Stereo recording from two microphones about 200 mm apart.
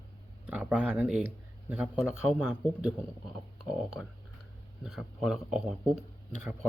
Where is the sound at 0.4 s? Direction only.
5° right (ahead or behind).